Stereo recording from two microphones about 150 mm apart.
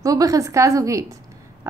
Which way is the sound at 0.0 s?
25° right (ahead or behind).